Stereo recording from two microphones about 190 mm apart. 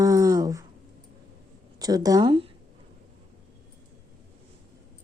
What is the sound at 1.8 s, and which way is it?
Speech, 20° right (ahead or behind).